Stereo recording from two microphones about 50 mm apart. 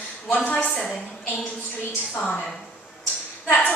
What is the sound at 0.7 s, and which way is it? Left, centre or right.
Speech, centre.